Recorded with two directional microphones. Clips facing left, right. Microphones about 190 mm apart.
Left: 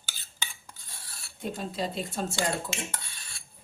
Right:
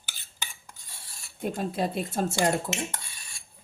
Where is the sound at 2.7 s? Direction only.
20° right (ahead or behind).